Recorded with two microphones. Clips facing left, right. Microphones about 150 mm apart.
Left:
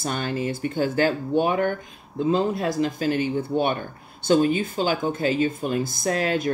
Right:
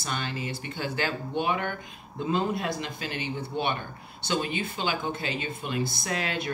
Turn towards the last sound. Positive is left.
turn(degrees=45)  # may be behind; listen again after turning